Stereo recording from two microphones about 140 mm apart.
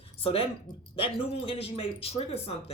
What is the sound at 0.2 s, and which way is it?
Speech, 45° left (ahead or behind).